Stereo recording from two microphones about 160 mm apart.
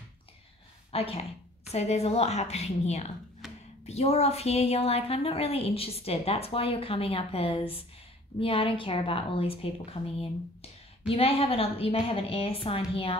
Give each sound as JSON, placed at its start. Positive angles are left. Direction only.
{"t": 0.9, "sound": "a woman's voice", "side_deg": 35}
{"t": 3.4, "sound": "a sound", "side_deg": 0}
{"t": 3.8, "sound": "a woman's voice", "side_deg": 40}